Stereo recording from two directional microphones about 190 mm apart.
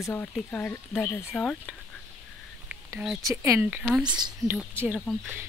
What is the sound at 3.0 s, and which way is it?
Speech, 5° right (ahead or behind).